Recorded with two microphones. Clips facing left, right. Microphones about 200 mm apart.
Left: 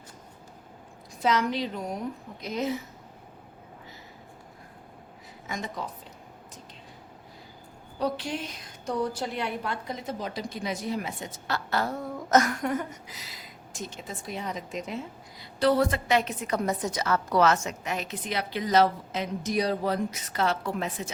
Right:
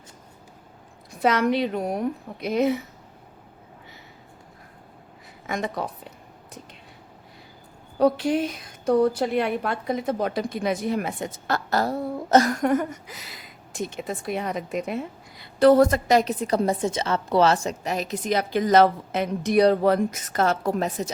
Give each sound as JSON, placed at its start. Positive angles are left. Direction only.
{"t": 1.2, "sound": "a woman's voice", "side_deg": -60}
{"t": 5.5, "sound": "a woman's voice", "side_deg": -60}
{"t": 7.9, "sound": "a woman's voice", "side_deg": -55}
{"t": 12.6, "sound": "a woman's voice", "side_deg": -50}